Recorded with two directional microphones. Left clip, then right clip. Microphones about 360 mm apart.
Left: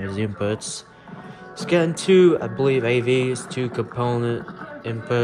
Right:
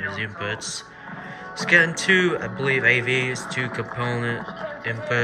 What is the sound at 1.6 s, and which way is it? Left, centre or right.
Speech, centre.